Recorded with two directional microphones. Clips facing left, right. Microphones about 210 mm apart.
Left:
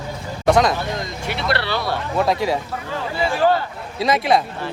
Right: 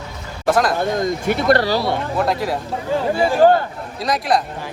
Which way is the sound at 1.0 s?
50° right (ahead or behind).